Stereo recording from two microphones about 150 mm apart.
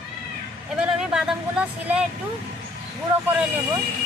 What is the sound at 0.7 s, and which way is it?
Speech, 5° right (ahead or behind).